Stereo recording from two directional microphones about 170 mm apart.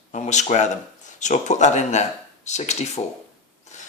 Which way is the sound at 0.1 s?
45° left (ahead or behind).